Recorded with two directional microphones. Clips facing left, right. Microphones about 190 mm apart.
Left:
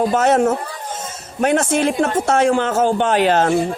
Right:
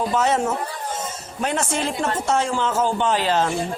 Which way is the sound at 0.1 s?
55° left (ahead or behind).